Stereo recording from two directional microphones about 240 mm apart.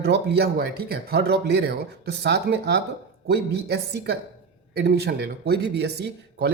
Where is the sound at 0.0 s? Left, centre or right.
Right.